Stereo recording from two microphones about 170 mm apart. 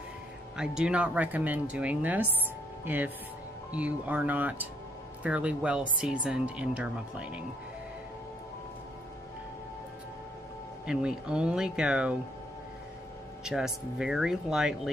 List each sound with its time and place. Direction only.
0.6 s speech: 5° right (ahead or behind)
10.9 s speech: 5° right (ahead or behind)
13.4 s speech: 5° right (ahead or behind)